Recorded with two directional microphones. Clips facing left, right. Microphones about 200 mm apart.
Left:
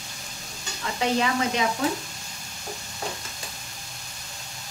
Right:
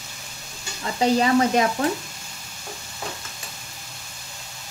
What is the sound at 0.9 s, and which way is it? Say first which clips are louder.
Stir: right 6 dB; 35° right (ahead or behind).